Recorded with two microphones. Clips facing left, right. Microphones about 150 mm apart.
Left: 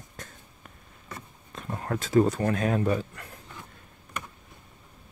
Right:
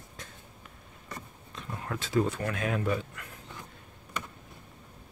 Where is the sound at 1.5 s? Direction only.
45° left (ahead or behind).